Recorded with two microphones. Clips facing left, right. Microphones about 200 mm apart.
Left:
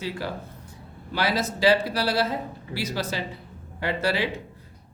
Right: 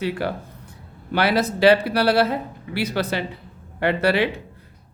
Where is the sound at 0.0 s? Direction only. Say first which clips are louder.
Right 6 dB; 60° right (ahead or behind).